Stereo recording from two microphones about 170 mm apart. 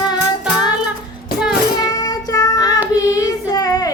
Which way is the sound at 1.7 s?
20° left (ahead or behind).